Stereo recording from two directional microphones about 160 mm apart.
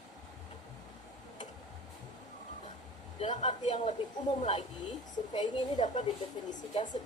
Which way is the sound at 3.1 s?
40° left (ahead or behind).